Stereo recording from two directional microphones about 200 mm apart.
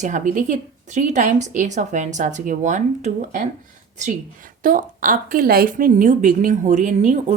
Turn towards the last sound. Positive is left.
turn(degrees=-40)  # may be behind; listen again after turning